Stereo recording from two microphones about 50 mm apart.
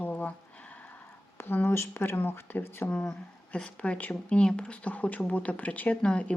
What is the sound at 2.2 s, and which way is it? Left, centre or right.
Speech, left.